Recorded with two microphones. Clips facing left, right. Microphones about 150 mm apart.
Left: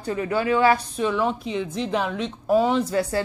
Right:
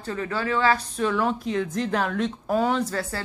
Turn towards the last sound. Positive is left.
turn(degrees=15)  # may be behind; listen again after turning